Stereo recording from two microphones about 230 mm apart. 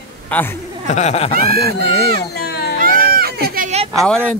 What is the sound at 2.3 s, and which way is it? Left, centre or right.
Baby cry, left.